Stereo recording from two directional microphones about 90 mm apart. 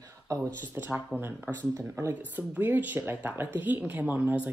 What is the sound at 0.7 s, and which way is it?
A woman's voice, 20° right (ahead or behind).